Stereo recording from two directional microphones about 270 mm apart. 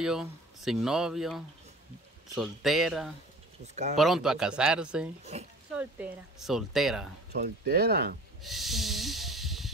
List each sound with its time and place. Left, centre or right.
0.0 s speech: centre
5.3 s speech: right
5.8 s speech: centre
7.3 s speech: right
8.4 s hiss: centre